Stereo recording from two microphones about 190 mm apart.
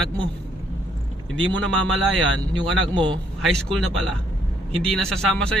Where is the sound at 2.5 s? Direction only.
25° right (ahead or behind).